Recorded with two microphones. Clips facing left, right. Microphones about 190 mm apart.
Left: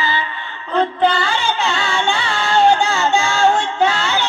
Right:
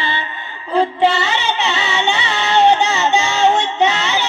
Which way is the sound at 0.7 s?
5° right (ahead or behind).